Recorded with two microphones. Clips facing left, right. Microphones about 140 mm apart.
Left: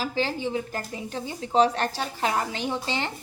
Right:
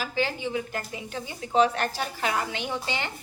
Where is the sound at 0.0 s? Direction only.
35° left (ahead or behind).